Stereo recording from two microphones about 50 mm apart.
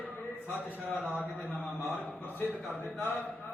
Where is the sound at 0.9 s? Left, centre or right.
Left.